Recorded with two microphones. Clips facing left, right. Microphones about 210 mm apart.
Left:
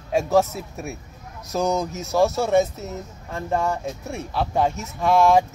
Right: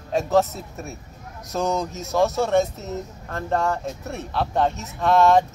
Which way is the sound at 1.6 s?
Centre (ahead or behind).